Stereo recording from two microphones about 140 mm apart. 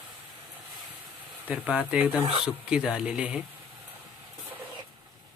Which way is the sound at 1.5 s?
10° right (ahead or behind).